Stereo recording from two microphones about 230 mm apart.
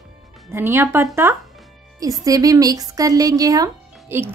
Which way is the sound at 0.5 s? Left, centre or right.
Centre.